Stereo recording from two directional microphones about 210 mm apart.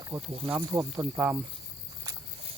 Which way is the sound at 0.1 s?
10° right (ahead or behind).